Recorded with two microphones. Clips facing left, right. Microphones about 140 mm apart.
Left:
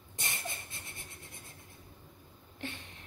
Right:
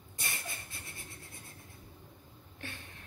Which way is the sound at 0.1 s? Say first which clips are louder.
Left 2 dB; 20° left (ahead or behind).